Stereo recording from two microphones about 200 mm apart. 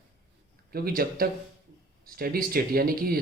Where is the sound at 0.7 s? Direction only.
50° right (ahead or behind).